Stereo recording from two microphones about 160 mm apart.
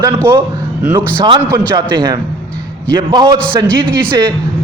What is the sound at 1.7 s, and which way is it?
A man's voice, 30° right (ahead or behind).